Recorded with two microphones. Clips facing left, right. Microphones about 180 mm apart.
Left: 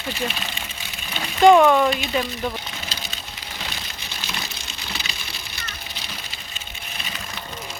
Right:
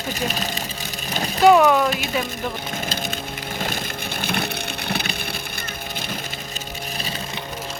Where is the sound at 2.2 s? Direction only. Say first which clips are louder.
Even; 50° right (ahead or behind).